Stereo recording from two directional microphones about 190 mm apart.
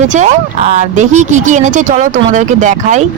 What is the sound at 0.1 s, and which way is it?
Speech, 40° right (ahead or behind).